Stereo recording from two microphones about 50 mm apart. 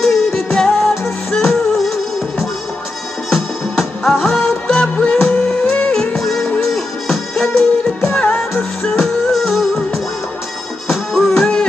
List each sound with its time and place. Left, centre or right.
0.0 s music: centre
3.3 s music: centre
10.9 s music: centre
11.3 s music: centre